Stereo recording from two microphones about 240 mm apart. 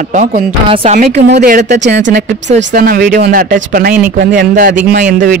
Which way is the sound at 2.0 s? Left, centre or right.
Right.